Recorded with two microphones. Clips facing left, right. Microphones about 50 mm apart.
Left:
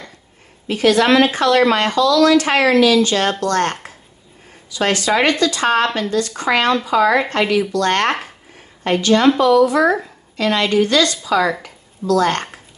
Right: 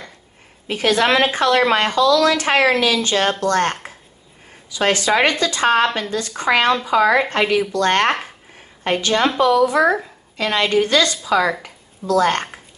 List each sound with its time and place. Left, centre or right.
0.7 s a woman's voice: right